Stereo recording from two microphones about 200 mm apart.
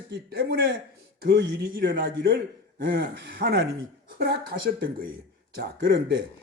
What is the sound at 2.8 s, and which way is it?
Speech, 50° right (ahead or behind).